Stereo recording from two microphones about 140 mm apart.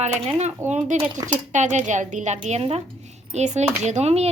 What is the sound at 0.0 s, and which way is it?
A woman's voice, 55° right (ahead or behind).